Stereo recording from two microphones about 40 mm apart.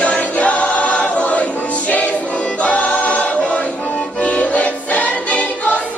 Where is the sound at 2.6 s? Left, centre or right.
Left.